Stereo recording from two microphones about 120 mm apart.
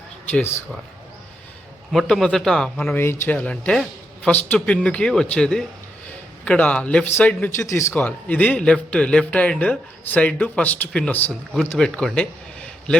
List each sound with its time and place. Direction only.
0.3 s a man's voice: 10° left (ahead or behind)
1.9 s speech: centre (ahead or behind)
3.0 s a man's voice: 20° left (ahead or behind)
7.7 s a man's voice: 25° left (ahead or behind)